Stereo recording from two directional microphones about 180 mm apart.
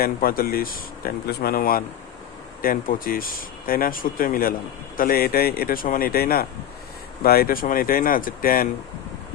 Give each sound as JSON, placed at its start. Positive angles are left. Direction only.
{"t": 0.0, "sound": "speech", "side_deg": 55}